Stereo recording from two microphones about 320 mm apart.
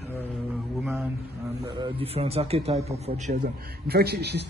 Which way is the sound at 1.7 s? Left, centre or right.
Centre.